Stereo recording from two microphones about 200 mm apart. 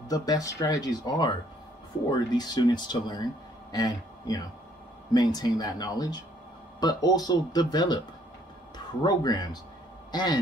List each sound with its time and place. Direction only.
0.1 s a man's voice: 20° left (ahead or behind)